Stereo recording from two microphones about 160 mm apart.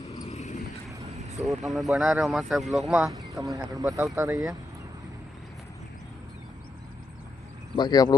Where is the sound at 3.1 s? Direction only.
20° right (ahead or behind).